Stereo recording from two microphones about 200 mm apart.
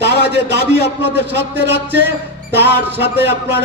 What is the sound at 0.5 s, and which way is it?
A man's voice, 60° right (ahead or behind).